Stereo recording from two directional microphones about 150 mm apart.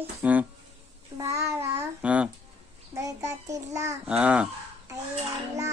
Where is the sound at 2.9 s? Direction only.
20° right (ahead or behind).